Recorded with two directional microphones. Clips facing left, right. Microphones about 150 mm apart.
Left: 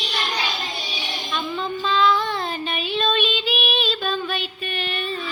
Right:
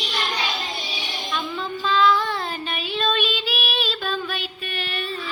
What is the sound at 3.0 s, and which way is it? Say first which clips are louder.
Female singing: left 1 dB; 5° right (ahead or behind).